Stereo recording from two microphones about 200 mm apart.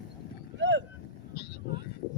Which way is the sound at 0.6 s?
70° right (ahead or behind).